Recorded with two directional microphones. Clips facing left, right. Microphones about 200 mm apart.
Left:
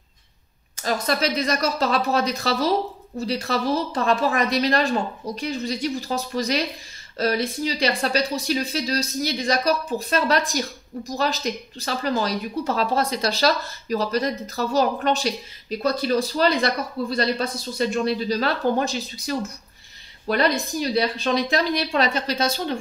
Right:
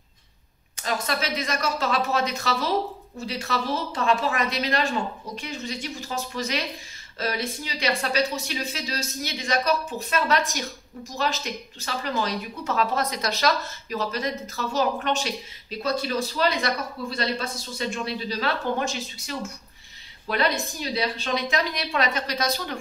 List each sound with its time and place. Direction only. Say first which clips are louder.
0.8 s speech: left 5 dB; 35° left (ahead or behind)